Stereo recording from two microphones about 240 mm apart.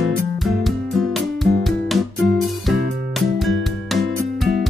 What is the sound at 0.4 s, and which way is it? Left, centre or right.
Music, centre.